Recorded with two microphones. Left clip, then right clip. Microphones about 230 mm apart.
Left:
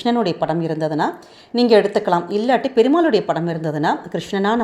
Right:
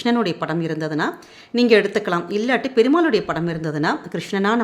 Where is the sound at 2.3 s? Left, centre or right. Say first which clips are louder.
Even; centre.